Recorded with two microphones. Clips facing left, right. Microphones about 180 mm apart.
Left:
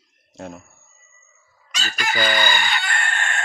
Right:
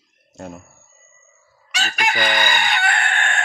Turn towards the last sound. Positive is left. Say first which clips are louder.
# right 5 dB
turn(degrees=-65)  # may be behind; listen again after turning